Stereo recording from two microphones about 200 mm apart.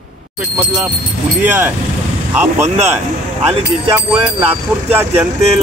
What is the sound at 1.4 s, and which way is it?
Speech, 10° right (ahead or behind).